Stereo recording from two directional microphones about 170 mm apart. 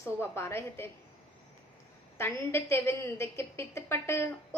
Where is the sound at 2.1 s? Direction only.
15° left (ahead or behind).